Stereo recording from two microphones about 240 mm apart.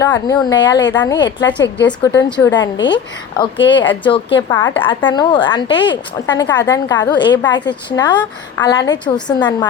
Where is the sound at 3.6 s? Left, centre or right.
Left.